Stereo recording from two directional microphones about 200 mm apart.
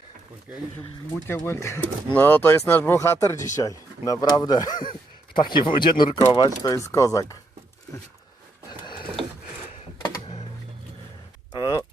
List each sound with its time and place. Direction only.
1.3 s speech: 10° left (ahead or behind)
10.0 s computer keyboard: 30° left (ahead or behind)
11.5 s a sound: 20° left (ahead or behind)